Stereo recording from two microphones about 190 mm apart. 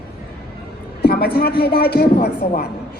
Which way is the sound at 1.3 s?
55° left (ahead or behind).